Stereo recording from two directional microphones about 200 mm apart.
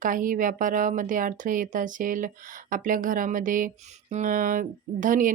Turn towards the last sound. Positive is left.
turn(degrees=-40)  # may be behind; listen again after turning